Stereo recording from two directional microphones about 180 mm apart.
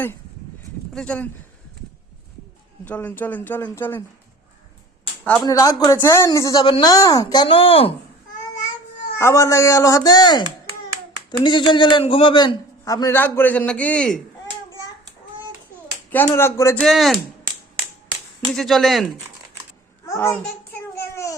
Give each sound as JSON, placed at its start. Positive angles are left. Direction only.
{"t": 0.9, "sound": "speech", "side_deg": 5}
{"t": 2.8, "sound": "speech", "side_deg": 10}
{"t": 5.2, "sound": "speech", "side_deg": 5}
{"t": 5.5, "sound": "a man's voice", "side_deg": 20}
{"t": 9.1, "sound": "a man's voice", "side_deg": 15}
{"t": 16.1, "sound": "speech", "side_deg": 10}
{"t": 16.8, "sound": "speech", "side_deg": 0}
{"t": 18.5, "sound": "speech", "side_deg": 0}
{"t": 20.1, "sound": "a child's voice", "side_deg": 15}
{"t": 20.9, "sound": "a sound", "side_deg": 15}